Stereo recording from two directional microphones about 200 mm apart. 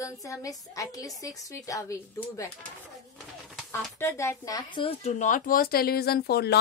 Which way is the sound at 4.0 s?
10° left (ahead or behind).